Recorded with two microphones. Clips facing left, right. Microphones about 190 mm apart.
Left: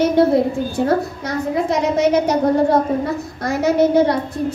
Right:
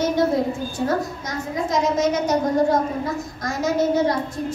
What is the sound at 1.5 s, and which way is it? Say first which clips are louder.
A woman's voice: left 3 dB; 65° left (ahead or behind).